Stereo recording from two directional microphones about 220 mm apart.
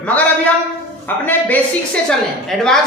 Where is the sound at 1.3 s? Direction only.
5° left (ahead or behind).